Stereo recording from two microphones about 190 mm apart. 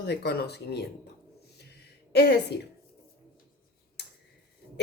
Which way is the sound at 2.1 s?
60° left (ahead or behind).